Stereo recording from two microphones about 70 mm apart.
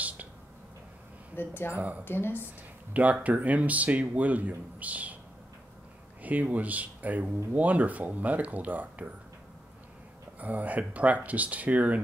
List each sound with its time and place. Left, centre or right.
1.3 s speech: left
1.7 s speech: right
2.0 s speech: left
2.9 s speech: right
6.2 s speech: right
10.4 s speech: right